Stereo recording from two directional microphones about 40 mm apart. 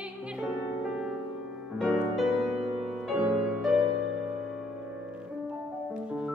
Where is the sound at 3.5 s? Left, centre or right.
Centre.